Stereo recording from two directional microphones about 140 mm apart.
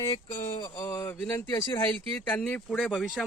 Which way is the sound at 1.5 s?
30° left (ahead or behind).